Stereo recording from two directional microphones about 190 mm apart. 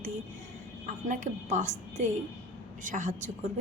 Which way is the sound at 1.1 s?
40° right (ahead or behind).